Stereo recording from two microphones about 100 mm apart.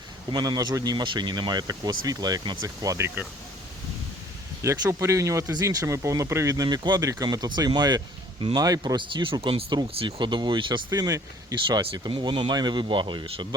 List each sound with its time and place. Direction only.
0.3 s speech: 40° right (ahead or behind)
2.6 s speech: 35° right (ahead or behind)
4.6 s speech: 30° right (ahead or behind); by 7.0 s 45° right (ahead or behind)
7.0 s speech: 35° right (ahead or behind)
9.0 s speech: 55° right (ahead or behind)
10.9 s speech: 35° right (ahead or behind)
11.6 s speech: 50° right (ahead or behind)